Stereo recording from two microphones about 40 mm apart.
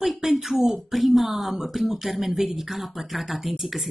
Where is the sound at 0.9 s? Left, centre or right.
Centre.